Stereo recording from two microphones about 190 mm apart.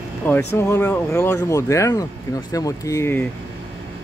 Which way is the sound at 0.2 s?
10° left (ahead or behind).